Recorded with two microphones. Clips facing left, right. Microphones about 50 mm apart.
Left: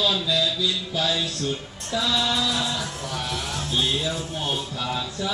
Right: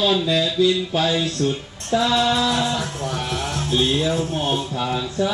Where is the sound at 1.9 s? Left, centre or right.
Right.